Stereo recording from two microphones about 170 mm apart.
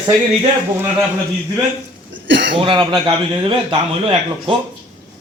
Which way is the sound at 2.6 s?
30° right (ahead or behind).